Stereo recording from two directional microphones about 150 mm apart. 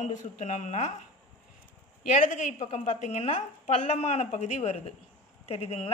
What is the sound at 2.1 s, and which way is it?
A woman's voice, 55° left (ahead or behind).